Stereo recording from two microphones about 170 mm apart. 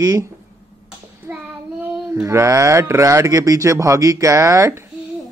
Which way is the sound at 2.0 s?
15° right (ahead or behind).